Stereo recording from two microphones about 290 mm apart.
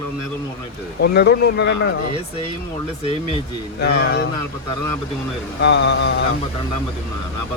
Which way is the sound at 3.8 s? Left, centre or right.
Left.